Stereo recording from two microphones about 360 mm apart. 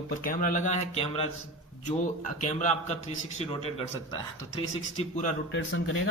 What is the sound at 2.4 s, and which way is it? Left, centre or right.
Speech, centre.